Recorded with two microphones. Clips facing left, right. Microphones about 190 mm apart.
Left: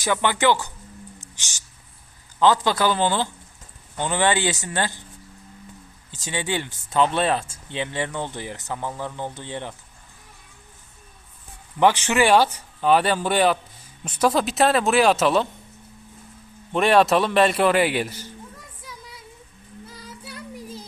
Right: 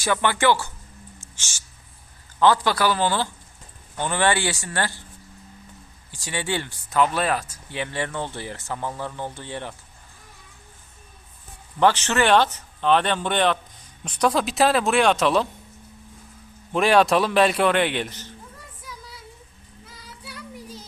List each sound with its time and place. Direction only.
0.0 s a man's voice: 15° left (ahead or behind)
6.1 s speech: 20° left (ahead or behind)
11.8 s a man's voice: 15° left (ahead or behind)
16.7 s a man's voice: centre (ahead or behind)